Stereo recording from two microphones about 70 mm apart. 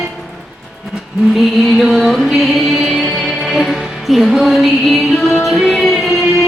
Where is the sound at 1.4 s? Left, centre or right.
Centre.